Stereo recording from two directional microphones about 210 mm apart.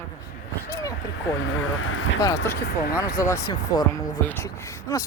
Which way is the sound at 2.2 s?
15° left (ahead or behind).